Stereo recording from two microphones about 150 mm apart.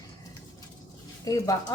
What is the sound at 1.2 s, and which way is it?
Speech, 20° left (ahead or behind).